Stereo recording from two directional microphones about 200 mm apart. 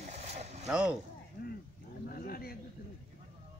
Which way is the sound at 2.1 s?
50° left (ahead or behind).